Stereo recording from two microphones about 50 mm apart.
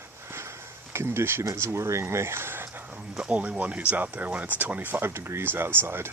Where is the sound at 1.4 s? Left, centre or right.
Right.